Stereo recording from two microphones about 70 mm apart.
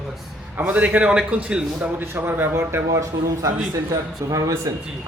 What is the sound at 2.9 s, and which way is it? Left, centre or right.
A man's voice, right.